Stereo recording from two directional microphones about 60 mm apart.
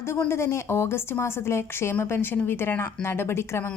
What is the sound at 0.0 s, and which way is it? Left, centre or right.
A woman's voice, left.